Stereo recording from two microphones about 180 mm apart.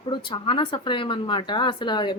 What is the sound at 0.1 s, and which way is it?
A woman's voice, 30° left (ahead or behind).